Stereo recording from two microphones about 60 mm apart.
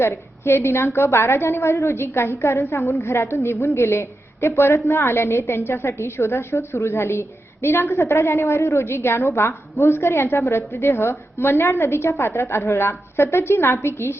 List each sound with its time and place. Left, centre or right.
0.0 s a woman's voice: left